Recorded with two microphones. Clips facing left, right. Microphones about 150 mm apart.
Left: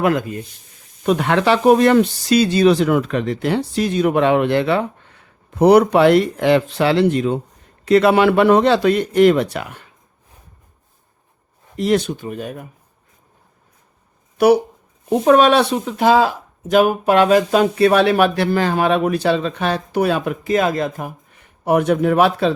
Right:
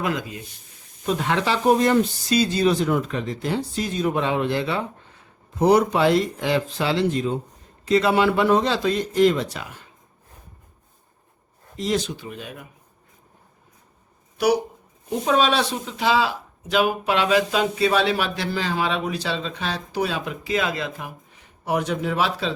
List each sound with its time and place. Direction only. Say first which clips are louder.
0.0 s speech: left 8 dB; 55° left (ahead or behind)
1.0 s speech: left 7 dB; 65° left (ahead or behind)
11.8 s speech: left 7 dB; 60° left (ahead or behind)
14.3 s speech: left 7 dB; 55° left (ahead or behind)